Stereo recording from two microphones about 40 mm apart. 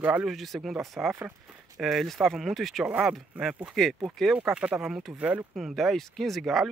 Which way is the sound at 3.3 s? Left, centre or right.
Right.